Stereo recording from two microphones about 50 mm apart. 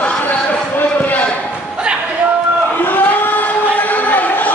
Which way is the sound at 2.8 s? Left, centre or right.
Left.